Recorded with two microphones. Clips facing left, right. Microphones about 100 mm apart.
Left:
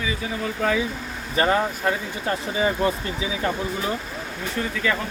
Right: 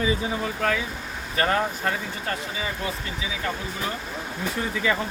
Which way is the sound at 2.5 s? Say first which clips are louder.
Left 9 dB; 40° left (ahead or behind).